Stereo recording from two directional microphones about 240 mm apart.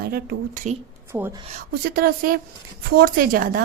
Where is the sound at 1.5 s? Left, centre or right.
Right.